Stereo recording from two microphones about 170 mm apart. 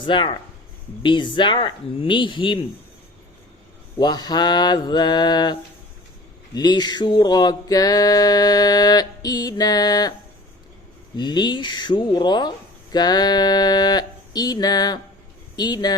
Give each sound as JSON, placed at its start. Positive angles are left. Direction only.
{"t": 0.0, "sound": "speech", "side_deg": 30}
{"t": 3.9, "sound": "speech", "side_deg": 25}
{"t": 11.2, "sound": "speech", "side_deg": 25}